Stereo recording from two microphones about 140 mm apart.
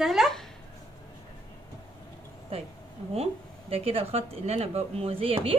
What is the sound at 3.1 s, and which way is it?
Speech, 45° right (ahead or behind).